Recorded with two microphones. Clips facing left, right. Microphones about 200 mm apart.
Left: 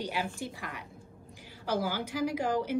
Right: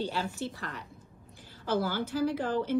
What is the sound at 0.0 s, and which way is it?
A woman's voice, 15° left (ahead or behind).